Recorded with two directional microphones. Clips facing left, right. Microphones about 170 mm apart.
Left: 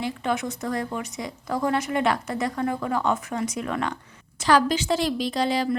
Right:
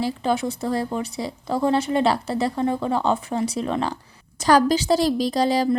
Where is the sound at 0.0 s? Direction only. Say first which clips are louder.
Right 4 dB; 30° right (ahead or behind).